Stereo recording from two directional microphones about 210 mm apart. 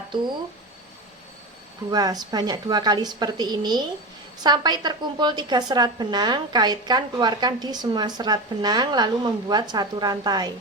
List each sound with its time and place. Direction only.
0.1 s speech: 20° right (ahead or behind)
1.9 s a woman's voice: 20° right (ahead or behind)